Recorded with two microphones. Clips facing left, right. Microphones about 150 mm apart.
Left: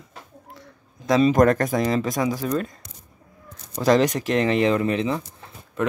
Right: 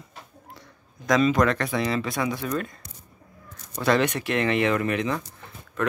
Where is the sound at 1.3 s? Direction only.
45° left (ahead or behind).